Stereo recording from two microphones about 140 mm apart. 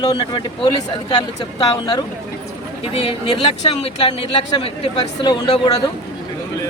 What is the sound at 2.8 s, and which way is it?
Speech, 45° left (ahead or behind).